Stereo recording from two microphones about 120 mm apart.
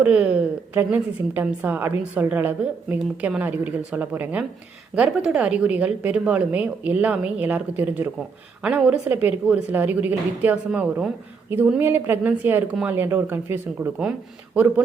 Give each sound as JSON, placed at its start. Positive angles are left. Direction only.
{"t": 0.0, "sound": "a woman's voice", "side_deg": -10}